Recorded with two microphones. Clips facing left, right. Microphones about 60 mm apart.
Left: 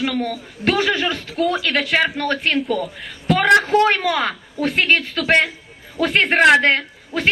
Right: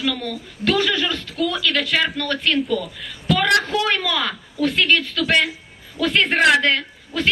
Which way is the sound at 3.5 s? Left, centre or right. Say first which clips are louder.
Left 5 dB; left.